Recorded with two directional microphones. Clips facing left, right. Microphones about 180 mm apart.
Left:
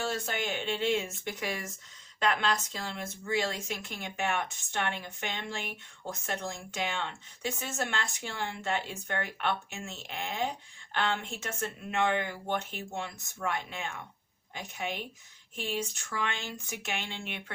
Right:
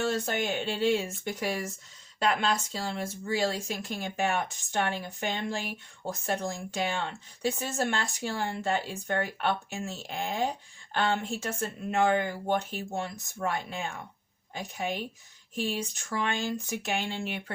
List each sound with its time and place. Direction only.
0.0 s speech: 45° right (ahead or behind)
0.6 s speech: 35° right (ahead or behind)